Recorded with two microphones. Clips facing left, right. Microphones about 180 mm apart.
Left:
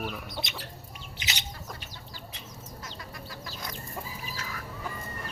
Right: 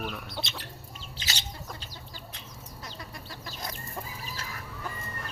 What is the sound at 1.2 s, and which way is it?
Bird, 20° left (ahead or behind).